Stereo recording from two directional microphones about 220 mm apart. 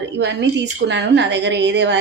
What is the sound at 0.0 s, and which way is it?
A woman's voice, 55° right (ahead or behind).